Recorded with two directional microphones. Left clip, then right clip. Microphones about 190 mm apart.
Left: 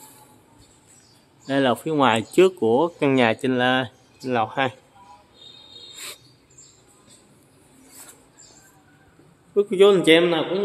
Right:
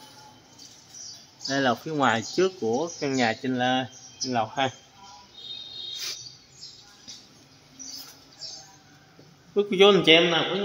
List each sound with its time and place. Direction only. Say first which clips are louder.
1.5 s speech: left 4 dB; 25° left (ahead or behind)
9.6 s a man's voice: left 3 dB; 5° left (ahead or behind)